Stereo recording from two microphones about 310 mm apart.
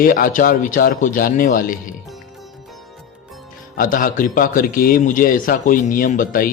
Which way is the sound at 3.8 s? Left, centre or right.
Left.